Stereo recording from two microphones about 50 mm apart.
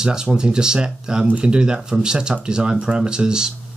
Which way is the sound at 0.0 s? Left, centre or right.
Centre.